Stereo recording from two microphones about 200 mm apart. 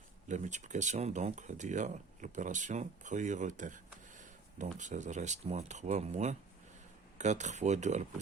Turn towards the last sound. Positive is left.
turn(degrees=-35)  # may be behind; listen again after turning